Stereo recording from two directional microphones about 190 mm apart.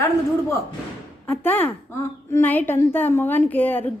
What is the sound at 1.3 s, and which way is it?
A woman's voice, 10° left (ahead or behind).